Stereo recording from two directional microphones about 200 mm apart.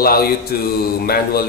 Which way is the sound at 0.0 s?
50° left (ahead or behind).